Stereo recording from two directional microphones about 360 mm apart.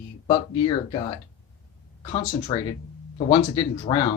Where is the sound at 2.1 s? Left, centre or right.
Centre.